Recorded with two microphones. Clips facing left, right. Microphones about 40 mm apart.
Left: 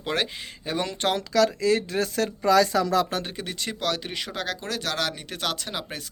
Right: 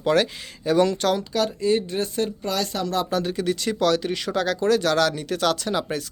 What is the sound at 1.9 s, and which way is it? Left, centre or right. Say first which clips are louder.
Speech: even; left.